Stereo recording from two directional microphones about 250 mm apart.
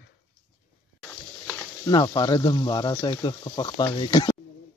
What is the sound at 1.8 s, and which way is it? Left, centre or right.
Speech, centre.